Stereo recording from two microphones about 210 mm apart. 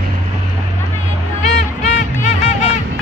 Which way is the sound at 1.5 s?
35° left (ahead or behind).